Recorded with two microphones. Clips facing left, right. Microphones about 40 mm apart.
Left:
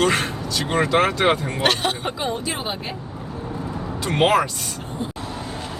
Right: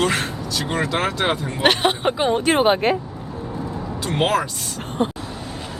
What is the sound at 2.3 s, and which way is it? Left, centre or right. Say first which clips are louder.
Speech: right 10 dB; right.